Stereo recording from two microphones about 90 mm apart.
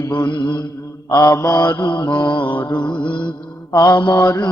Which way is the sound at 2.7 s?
55° left (ahead or behind).